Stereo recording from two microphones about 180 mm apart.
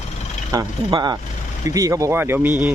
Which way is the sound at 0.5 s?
25° right (ahead or behind).